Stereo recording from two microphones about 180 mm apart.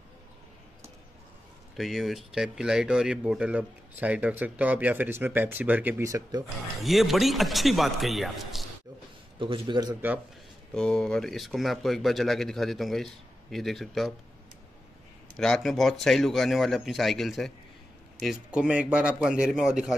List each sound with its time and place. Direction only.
1.8 s speech: centre (ahead or behind); by 6.4 s 20° right (ahead or behind)
6.8 s speech: centre (ahead or behind)
9.4 s a man's voice: 25° right (ahead or behind)
10.7 s speech: 5° left (ahead or behind)
15.3 s speech: centre (ahead or behind)